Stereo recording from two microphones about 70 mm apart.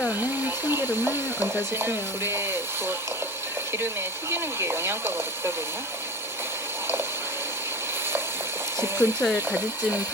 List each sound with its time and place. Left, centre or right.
0.2 s hair dryer: right
1.7 s speech: right
4.3 s speech: right
8.8 s a sound: right
9.2 s speech: centre